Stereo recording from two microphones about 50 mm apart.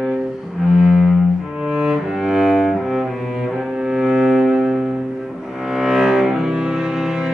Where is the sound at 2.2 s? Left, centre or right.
Centre.